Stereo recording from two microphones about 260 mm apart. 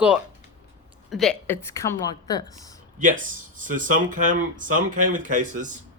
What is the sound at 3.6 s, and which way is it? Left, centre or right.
Speech, right.